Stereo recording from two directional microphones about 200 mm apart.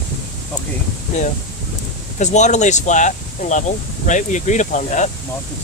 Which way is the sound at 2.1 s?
35° left (ahead or behind).